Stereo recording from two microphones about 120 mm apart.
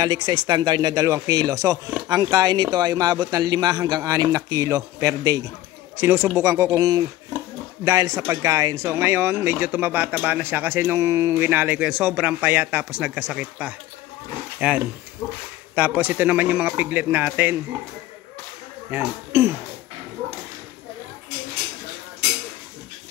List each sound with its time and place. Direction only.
0.0 s a man's voice: 35° right (ahead or behind); by 17.6 s 15° right (ahead or behind)
18.9 s speech: 20° right (ahead or behind)